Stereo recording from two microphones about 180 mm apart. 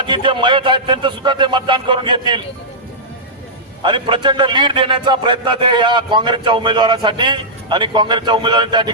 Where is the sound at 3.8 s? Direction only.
25° right (ahead or behind).